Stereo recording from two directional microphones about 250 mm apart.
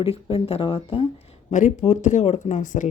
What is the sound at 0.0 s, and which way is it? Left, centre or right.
Speech, left.